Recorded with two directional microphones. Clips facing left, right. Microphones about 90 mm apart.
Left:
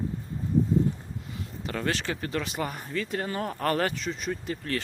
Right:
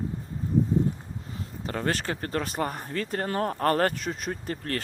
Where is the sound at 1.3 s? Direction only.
35° right (ahead or behind).